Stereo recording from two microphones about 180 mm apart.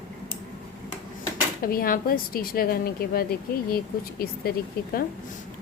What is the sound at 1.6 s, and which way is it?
A woman's voice, 55° left (ahead or behind).